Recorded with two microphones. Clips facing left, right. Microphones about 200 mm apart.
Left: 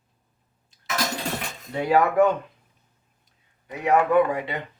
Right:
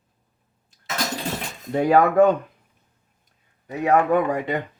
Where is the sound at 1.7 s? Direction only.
45° right (ahead or behind).